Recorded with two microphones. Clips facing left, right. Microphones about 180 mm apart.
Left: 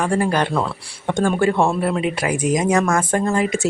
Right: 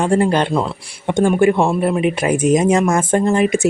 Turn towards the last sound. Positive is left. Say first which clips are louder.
# right 4 dB
turn(degrees=-20)  # may be behind; listen again after turning